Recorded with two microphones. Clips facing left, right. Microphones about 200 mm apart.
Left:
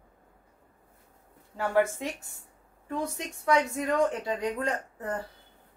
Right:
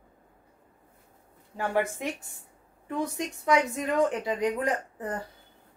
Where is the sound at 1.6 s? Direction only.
15° right (ahead or behind).